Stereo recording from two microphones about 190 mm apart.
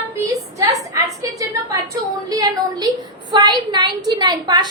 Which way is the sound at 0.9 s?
15° right (ahead or behind).